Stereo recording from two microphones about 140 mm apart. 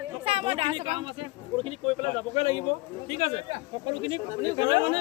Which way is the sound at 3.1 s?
45° right (ahead or behind).